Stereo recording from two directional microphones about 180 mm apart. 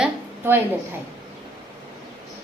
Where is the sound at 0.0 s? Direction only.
10° right (ahead or behind).